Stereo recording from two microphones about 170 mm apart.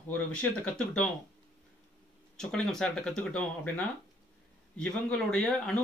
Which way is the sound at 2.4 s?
5° left (ahead or behind).